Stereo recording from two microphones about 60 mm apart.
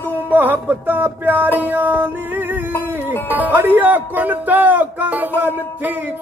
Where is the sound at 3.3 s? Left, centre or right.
Right.